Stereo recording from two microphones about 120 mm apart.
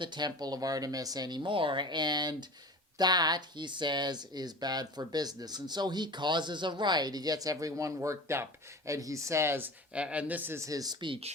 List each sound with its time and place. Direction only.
0.0 s speech: 40° right (ahead or behind)
11.0 s speech: 45° right (ahead or behind)